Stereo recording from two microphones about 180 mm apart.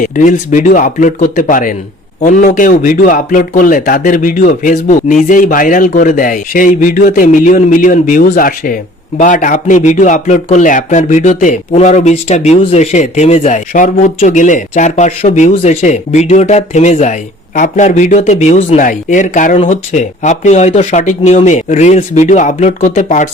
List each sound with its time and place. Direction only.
0.0 s speech: 45° left (ahead or behind)